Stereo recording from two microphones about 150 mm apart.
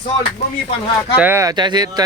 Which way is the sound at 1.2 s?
15° right (ahead or behind).